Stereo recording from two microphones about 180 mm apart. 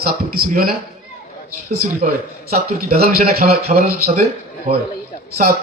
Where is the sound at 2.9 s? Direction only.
55° right (ahead or behind).